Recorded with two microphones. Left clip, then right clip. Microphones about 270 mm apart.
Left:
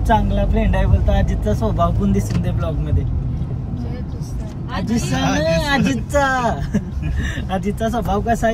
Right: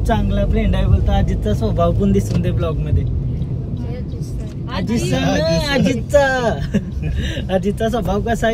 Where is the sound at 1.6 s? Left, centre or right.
Centre.